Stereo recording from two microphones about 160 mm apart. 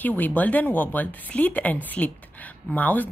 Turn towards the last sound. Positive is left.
turn(degrees=10)  # may be behind; listen again after turning